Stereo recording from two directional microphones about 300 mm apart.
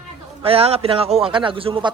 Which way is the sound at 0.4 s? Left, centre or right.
Centre.